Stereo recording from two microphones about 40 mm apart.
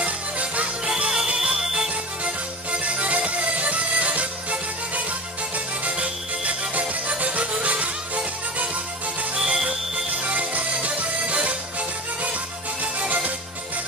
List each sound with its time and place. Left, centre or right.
0.0 s music: right
0.8 s music: centre
2.2 s music: right
9.3 s music: centre
10.1 s music: right
12.8 s music: right